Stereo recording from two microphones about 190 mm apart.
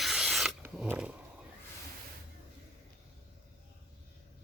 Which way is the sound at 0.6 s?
10° right (ahead or behind).